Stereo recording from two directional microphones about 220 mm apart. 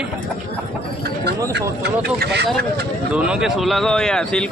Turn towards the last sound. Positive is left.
turn(degrees=5)  # may be behind; listen again after turning